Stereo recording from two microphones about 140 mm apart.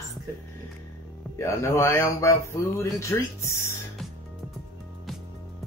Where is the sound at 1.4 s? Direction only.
20° left (ahead or behind).